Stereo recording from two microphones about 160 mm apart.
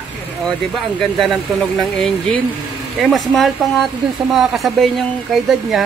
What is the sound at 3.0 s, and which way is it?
Speech, centre (ahead or behind).